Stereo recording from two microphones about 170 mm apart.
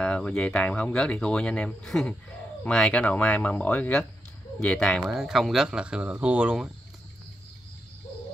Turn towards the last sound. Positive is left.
turn(degrees=-5)  # may be behind; listen again after turning